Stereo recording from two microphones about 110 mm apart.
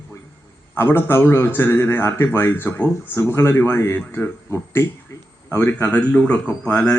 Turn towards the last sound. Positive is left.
turn(degrees=10)  # may be behind; listen again after turning